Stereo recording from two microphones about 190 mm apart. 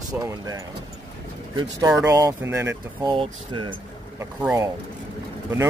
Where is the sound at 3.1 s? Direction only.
25° right (ahead or behind).